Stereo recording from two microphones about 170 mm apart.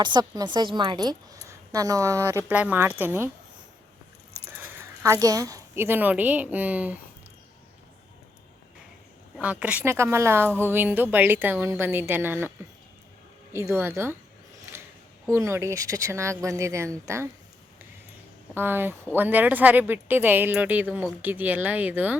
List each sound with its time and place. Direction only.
0.0 s a woman's voice: 25° right (ahead or behind)
4.8 s a woman's voice: 15° right (ahead or behind)
9.4 s speech: 5° right (ahead or behind)
13.5 s speech: 15° right (ahead or behind)
14.7 s a sound: 15° right (ahead or behind)
15.3 s speech: 15° right (ahead or behind)
18.5 s speech: 10° right (ahead or behind)